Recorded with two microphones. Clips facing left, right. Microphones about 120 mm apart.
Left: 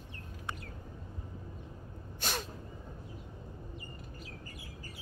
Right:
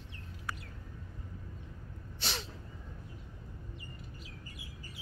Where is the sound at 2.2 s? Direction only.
50° left (ahead or behind).